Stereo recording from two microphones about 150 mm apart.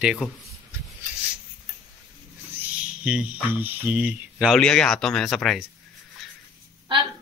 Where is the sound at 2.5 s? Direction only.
10° right (ahead or behind).